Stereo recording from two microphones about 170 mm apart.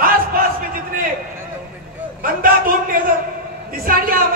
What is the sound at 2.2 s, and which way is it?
Speech, 55° right (ahead or behind).